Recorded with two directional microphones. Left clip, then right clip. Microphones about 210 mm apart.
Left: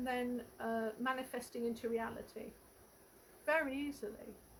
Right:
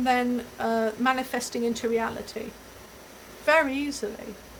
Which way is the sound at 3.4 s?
20° right (ahead or behind).